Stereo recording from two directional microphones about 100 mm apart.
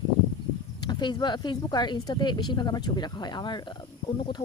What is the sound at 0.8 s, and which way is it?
Speech, 50° left (ahead or behind).